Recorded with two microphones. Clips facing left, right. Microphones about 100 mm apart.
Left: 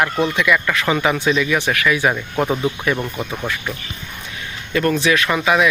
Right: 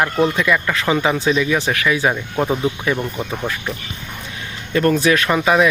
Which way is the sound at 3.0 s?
5° right (ahead or behind).